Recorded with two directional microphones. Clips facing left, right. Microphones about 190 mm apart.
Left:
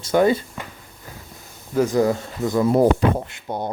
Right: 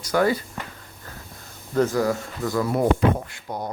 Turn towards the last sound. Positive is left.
turn(degrees=25)  # may be behind; listen again after turning